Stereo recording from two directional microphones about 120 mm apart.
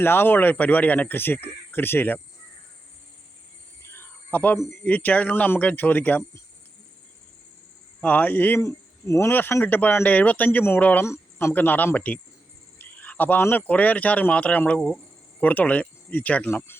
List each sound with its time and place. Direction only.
0.0 s speech: 20° left (ahead or behind)
3.8 s a sound: 20° left (ahead or behind)
4.8 s speech: 15° left (ahead or behind)
8.0 s speech: 10° left (ahead or behind)